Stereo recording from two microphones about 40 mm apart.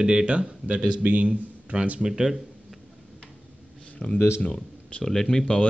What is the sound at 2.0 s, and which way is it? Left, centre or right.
Speech, centre.